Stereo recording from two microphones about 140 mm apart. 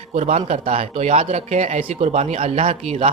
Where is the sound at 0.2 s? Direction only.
50° right (ahead or behind).